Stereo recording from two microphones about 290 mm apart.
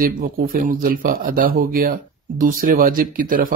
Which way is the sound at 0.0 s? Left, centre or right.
Right.